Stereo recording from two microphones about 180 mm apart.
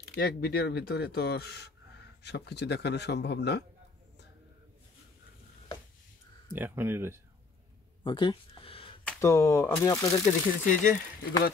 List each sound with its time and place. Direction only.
0.1 s a man's voice: 60° left (ahead or behind)
6.5 s speech: 10° right (ahead or behind)
8.0 s a sound: 25° left (ahead or behind)
9.0 s speech: 15° left (ahead or behind)
10.2 s speech: 45° left (ahead or behind)